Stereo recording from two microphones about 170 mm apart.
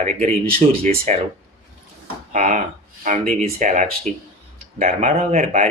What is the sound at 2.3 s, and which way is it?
Speech, 45° right (ahead or behind).